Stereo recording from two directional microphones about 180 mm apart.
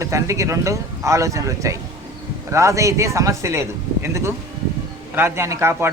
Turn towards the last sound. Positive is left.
turn(degrees=-15)  # may be behind; listen again after turning